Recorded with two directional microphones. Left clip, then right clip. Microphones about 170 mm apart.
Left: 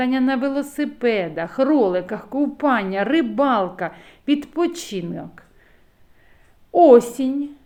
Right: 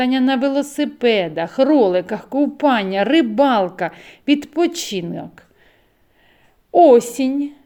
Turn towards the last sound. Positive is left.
turn(degrees=-35)  # may be behind; listen again after turning